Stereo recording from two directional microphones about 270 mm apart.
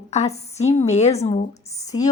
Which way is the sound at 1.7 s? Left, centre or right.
Centre.